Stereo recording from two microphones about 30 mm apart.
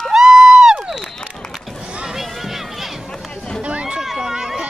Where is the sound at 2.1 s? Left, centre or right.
Centre.